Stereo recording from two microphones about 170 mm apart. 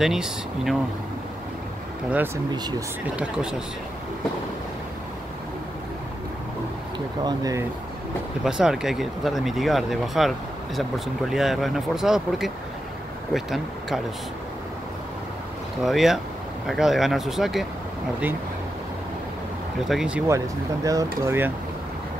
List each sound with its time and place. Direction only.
0.0 s speech: centre (ahead or behind)
2.0 s speech: 10° right (ahead or behind)
2.5 s speech: 25° right (ahead or behind)
3.2 s speech: 5° right (ahead or behind)
7.2 s speech: 20° right (ahead or behind)
8.5 s speech: 5° right (ahead or behind)
15.8 s speech: centre (ahead or behind)
19.9 s speech: 5° right (ahead or behind)
20.2 s speech: 20° right (ahead or behind)